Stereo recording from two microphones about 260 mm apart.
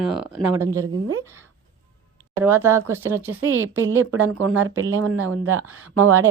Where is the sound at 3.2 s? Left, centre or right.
Right.